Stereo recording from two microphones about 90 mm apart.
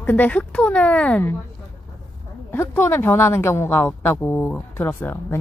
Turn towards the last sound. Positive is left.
turn(degrees=25)  # may be behind; listen again after turning